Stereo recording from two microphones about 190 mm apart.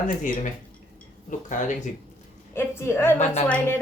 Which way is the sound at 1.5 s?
40° left (ahead or behind).